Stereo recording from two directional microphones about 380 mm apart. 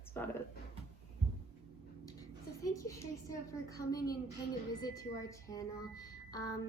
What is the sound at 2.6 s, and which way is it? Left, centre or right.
Speech, centre.